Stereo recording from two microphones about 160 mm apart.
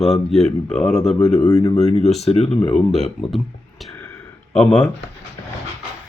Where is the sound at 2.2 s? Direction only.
40° left (ahead or behind).